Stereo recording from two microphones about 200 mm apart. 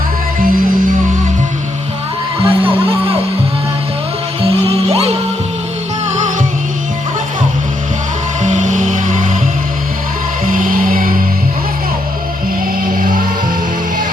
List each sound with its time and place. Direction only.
2.4 s music: 25° right (ahead or behind)
4.4 s music: 30° right (ahead or behind)
8.4 s music: 40° right (ahead or behind)
10.4 s music: 45° right (ahead or behind)
12.8 s music: 45° right (ahead or behind)